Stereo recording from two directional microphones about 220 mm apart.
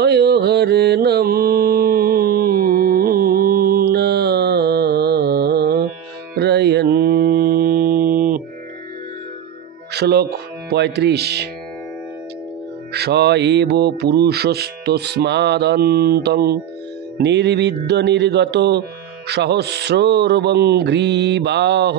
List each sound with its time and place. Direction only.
0.0 s mantra: 50° right (ahead or behind)
9.9 s speech: 45° right (ahead or behind)
12.9 s speech: 50° right (ahead or behind)